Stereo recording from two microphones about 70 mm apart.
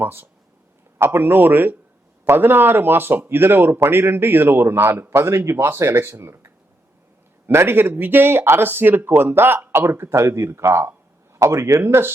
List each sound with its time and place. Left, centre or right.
0.0 s a man's voice: right